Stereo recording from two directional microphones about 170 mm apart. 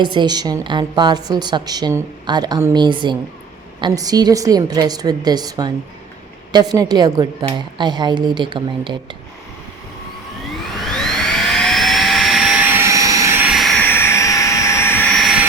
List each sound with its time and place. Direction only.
0.0 s a woman's voice: 25° right (ahead or behind)
10.5 s jet engine: centre (ahead or behind)